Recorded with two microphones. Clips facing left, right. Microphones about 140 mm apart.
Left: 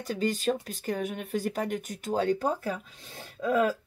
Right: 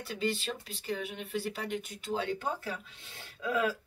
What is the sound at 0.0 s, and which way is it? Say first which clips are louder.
Speech: left 6 dB; 40° left (ahead or behind).